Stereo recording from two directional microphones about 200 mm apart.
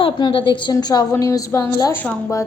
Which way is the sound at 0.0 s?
25° left (ahead or behind).